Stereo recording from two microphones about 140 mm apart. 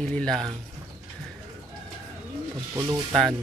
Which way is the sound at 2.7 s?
20° right (ahead or behind).